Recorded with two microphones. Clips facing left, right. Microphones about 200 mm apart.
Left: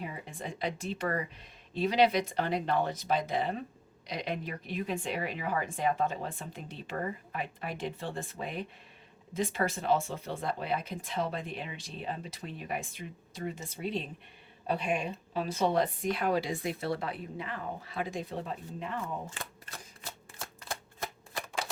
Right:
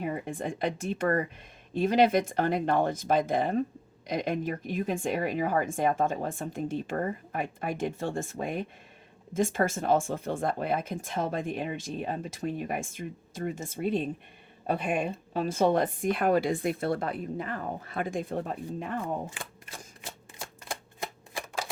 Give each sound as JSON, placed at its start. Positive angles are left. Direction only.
{"t": 0.0, "sound": "speech", "side_deg": -50}
{"t": 20.4, "sound": "shuffling cards", "side_deg": -15}